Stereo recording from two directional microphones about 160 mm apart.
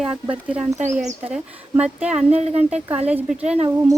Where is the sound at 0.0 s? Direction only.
5° right (ahead or behind).